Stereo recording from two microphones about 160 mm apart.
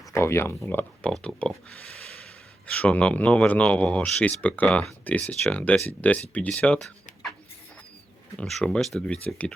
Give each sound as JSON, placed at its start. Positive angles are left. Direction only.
{"t": 0.1, "sound": "speech", "side_deg": 15}
{"t": 2.6, "sound": "speech", "side_deg": 10}
{"t": 8.4, "sound": "speech", "side_deg": 5}